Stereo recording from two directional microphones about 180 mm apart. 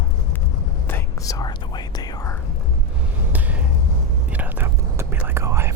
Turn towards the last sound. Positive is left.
turn(degrees=-15)  # may be behind; listen again after turning